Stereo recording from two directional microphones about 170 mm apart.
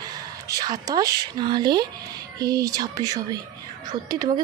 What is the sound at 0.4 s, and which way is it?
Speech, 20° right (ahead or behind).